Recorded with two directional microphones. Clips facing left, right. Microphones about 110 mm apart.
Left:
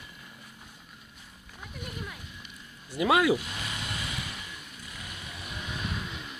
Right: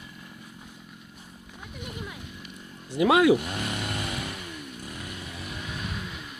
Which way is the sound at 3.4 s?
55° right (ahead or behind).